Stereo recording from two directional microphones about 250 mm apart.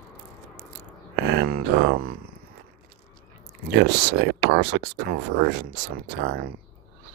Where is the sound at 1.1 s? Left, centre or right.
Right.